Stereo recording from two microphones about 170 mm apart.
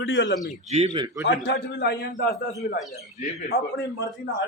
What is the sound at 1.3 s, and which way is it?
A man's voice, 80° left.